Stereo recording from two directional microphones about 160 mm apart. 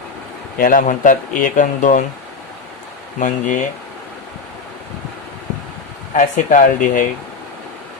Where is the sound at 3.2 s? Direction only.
55° left (ahead or behind).